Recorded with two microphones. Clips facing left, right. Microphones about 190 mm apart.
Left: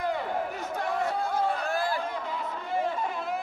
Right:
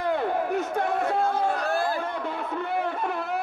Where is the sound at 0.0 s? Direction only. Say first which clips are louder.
Right 4 dB; 60° right (ahead or behind).